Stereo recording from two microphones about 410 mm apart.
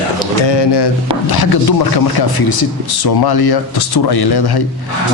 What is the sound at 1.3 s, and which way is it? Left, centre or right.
Speech, left.